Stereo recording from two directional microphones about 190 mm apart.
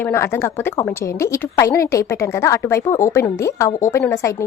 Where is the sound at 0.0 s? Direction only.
15° left (ahead or behind).